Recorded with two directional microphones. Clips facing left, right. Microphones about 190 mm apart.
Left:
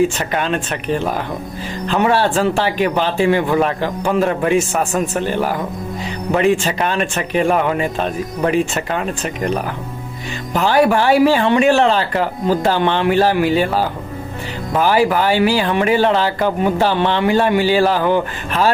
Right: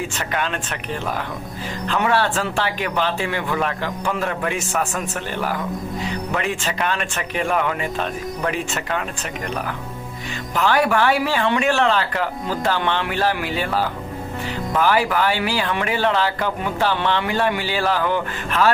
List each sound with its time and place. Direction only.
0.2 s speech: 30° left (ahead or behind)
1.9 s speech: 30° left (ahead or behind)
10.5 s speech: 30° left (ahead or behind)